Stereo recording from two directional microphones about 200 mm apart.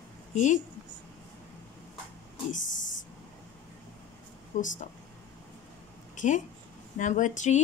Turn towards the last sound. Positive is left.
turn(degrees=40)  # may be behind; listen again after turning